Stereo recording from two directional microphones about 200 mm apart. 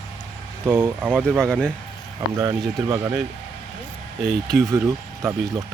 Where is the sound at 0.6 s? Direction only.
10° right (ahead or behind).